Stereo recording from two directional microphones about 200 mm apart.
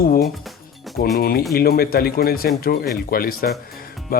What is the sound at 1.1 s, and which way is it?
Speech, 50° left (ahead or behind).